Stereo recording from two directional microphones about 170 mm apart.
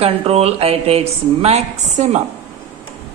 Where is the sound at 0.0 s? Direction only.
35° right (ahead or behind).